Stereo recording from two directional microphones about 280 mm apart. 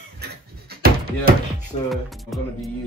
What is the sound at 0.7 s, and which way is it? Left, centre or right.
Music, right.